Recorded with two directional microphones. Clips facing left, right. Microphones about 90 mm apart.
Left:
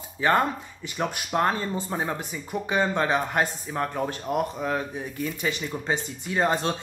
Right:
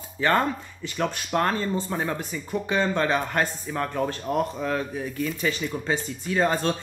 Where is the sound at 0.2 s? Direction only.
15° left (ahead or behind).